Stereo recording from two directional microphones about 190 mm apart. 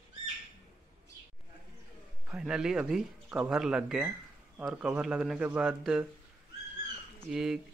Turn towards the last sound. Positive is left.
turn(degrees=0)  # may be behind; listen again after turning